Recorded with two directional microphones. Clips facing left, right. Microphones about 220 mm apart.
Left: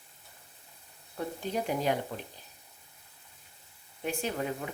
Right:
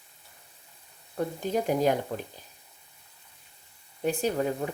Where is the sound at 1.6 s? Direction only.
45° right (ahead or behind).